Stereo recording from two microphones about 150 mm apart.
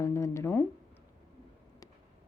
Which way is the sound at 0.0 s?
20° left (ahead or behind).